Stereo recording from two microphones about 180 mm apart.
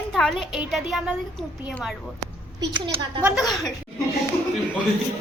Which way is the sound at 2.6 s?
20° right (ahead or behind).